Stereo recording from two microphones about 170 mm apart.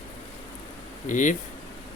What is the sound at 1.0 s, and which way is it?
Speech, 50° left (ahead or behind).